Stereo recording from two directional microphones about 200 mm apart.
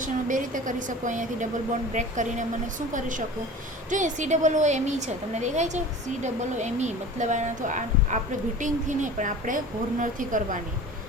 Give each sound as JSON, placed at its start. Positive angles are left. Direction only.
{"t": 0.0, "sound": "speech", "side_deg": -40}